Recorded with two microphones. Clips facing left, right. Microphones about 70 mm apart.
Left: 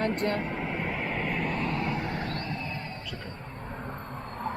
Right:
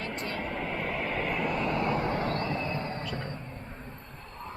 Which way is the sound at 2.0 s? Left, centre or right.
Right.